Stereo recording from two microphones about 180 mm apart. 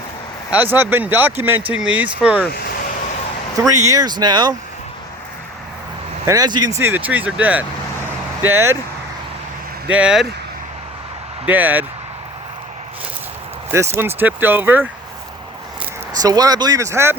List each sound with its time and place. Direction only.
0.5 s speech: 10° right (ahead or behind)
2.5 s vehicle: 55° left (ahead or behind)
3.5 s speech: 20° right (ahead or behind)
6.2 s speech: 20° right (ahead or behind)
9.9 s speech: 5° right (ahead or behind)
11.4 s speech: 10° right (ahead or behind)
13.7 s speech: 10° right (ahead or behind)
16.1 s speech: 20° right (ahead or behind)